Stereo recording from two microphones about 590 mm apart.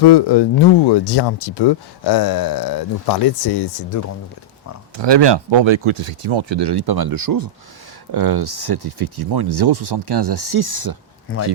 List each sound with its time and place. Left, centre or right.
0.0 s speech: left
4.9 s speech: right
11.3 s speech: left